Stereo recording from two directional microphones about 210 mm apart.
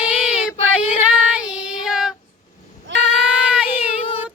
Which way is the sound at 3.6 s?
25° left (ahead or behind).